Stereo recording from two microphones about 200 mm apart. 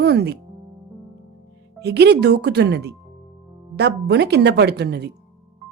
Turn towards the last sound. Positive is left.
turn(degrees=-55)  # may be behind; listen again after turning